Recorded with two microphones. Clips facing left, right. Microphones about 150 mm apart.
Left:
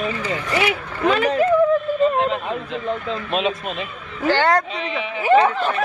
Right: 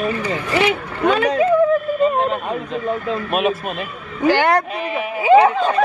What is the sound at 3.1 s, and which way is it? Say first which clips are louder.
Speech: right 3 dB; 55° right (ahead or behind).